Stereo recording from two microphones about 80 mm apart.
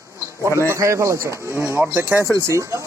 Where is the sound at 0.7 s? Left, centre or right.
Right.